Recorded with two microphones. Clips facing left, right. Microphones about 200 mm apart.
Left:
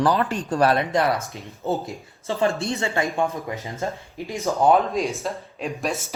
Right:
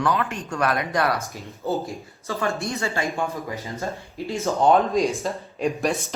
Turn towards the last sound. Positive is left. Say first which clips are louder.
# right 3 dB
turn(degrees=0)  # may be behind; listen again after turning